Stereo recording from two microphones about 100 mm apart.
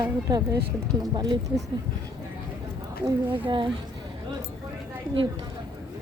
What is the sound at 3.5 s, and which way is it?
Speech, 55° right (ahead or behind).